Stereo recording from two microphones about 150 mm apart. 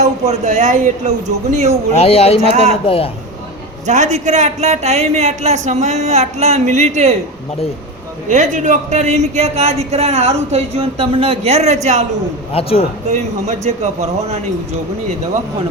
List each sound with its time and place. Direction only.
0.0 s speech: 50° right (ahead or behind)
2.0 s a man's voice: 45° left (ahead or behind)
3.8 s speech: 50° right (ahead or behind)
8.3 s speech: 55° right (ahead or behind)
13.1 s speech: 50° right (ahead or behind)